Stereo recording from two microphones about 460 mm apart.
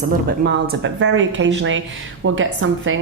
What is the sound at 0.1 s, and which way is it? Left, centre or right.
A woman's voice, right.